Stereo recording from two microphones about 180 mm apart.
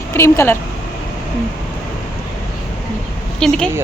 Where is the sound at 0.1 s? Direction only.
15° left (ahead or behind).